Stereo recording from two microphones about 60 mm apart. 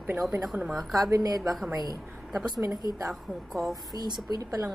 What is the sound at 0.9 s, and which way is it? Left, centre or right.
A woman's voice, right.